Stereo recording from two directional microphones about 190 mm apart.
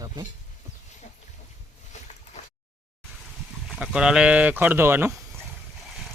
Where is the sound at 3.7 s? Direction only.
5° right (ahead or behind).